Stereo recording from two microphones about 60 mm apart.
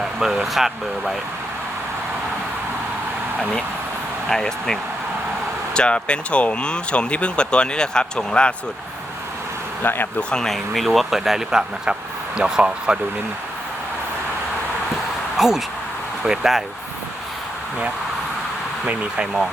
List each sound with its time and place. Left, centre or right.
0.0 s speech: centre
4.3 s speech: centre
9.8 s speech: left
10.4 s speech: centre
15.4 s speech: centre
18.9 s speech: centre